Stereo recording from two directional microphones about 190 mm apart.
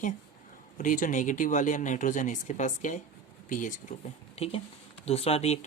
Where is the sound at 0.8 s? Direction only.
45° left (ahead or behind).